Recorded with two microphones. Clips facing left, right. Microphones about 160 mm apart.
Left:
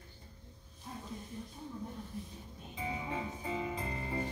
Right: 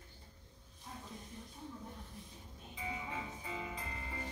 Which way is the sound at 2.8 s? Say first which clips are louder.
Left 5 dB; 30° left (ahead or behind).